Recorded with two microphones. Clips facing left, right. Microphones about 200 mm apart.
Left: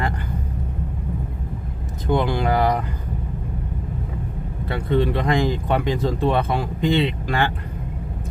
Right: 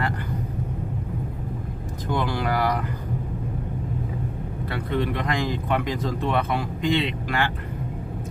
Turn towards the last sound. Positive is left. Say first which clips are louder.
# left 4 dB
turn(degrees=30)  # may be behind; listen again after turning